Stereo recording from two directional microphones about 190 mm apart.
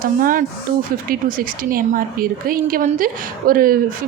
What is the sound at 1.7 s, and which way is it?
A woman's voice, 50° right (ahead or behind).